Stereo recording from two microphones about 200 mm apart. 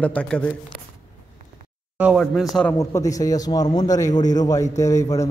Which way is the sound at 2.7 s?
15° left (ahead or behind).